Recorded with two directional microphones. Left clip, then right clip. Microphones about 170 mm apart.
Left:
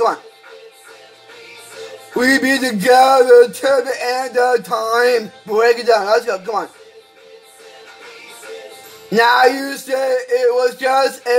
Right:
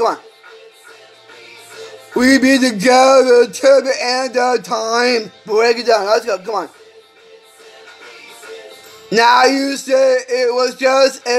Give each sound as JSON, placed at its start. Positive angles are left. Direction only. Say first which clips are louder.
{"t": 2.1, "sound": "speech", "louder": "right 2 dB", "side_deg": -15}
{"t": 9.1, "sound": "speech", "louder": "right 1 dB", "side_deg": -15}